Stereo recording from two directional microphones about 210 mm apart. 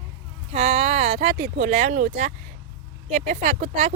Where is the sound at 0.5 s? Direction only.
30° right (ahead or behind).